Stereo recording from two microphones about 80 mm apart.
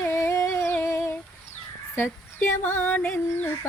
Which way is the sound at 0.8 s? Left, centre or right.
Left.